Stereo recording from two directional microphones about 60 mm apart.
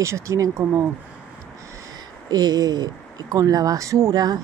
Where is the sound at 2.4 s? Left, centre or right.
Right.